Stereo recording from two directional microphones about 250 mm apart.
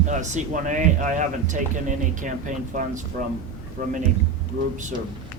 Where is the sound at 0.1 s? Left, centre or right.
Right.